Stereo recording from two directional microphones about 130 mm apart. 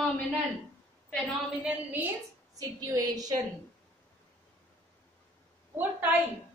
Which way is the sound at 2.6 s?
25° right (ahead or behind).